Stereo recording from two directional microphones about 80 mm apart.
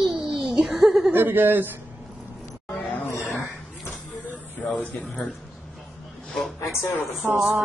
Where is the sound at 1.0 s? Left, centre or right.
Right.